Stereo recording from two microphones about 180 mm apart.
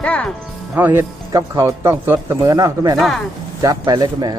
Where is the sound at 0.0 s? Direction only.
5° left (ahead or behind).